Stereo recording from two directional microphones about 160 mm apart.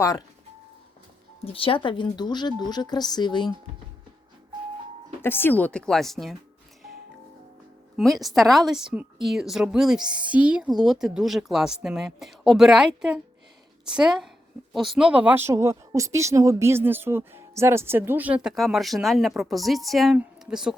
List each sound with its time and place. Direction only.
0.0 s speech: 20° left (ahead or behind)
1.5 s speech: 35° left (ahead or behind)
5.2 s speech: 15° left (ahead or behind)
7.9 s a woman's voice: centre (ahead or behind)